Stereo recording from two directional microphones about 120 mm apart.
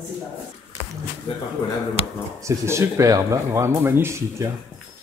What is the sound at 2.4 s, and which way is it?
Speech, 25° right (ahead or behind).